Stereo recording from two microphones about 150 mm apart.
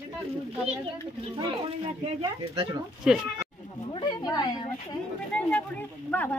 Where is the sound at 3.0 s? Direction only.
5° right (ahead or behind).